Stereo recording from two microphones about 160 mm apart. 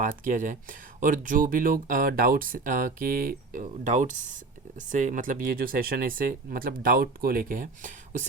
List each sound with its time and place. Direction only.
0.0 s speech: 55° right (ahead or behind)